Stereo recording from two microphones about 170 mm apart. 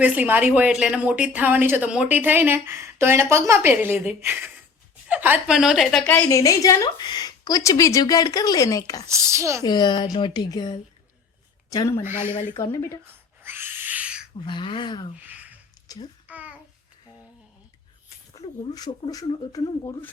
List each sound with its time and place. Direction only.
0.0 s a woman's voice: 10° right (ahead or behind)
6.2 s a woman's voice: 20° left (ahead or behind)
9.0 s a woman's voice: 15° right (ahead or behind)
9.6 s a woman's voice: 25° left (ahead or behind)
13.4 s owl: 15° right (ahead or behind)
14.4 s a woman's voice: 30° left (ahead or behind)
15.2 s a sound: 10° right (ahead or behind)
15.9 s a child's voice: 20° left (ahead or behind)
16.2 s a sound: 10° right (ahead or behind)
18.3 s a woman's voice: 20° left (ahead or behind)